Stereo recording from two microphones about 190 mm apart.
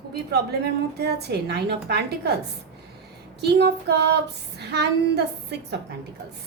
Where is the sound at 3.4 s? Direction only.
60° right (ahead or behind).